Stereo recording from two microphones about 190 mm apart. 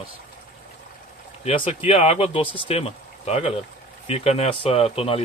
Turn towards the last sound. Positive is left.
turn(degrees=30)  # may be behind; listen again after turning